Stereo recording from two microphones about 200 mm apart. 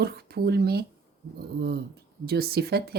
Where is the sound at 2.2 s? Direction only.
50° right (ahead or behind).